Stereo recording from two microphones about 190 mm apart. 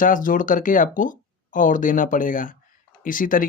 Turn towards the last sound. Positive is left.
turn(degrees=45)  # may be behind; listen again after turning